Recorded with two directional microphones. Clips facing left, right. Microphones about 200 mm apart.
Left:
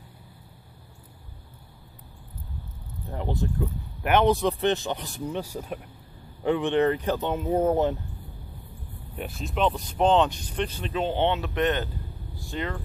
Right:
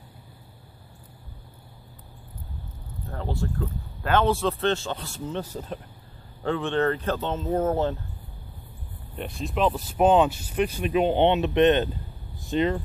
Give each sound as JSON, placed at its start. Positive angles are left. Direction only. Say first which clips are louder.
{"t": 3.1, "sound": "speech", "louder": "left 1 dB", "side_deg": 20}
{"t": 9.1, "sound": "speech", "louder": "right 2 dB", "side_deg": 5}